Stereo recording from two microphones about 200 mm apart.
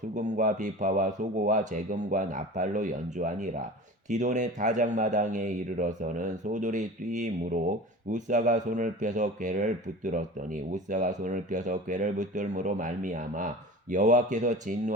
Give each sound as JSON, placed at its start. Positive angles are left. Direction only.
{"t": 0.1, "sound": "speech", "side_deg": -40}